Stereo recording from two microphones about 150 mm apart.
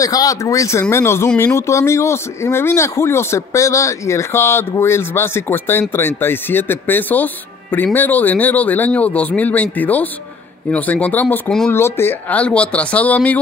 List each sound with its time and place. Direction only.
0.0 s speech: 25° left (ahead or behind)